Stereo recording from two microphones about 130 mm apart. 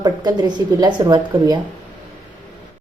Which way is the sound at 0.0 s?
30° right (ahead or behind).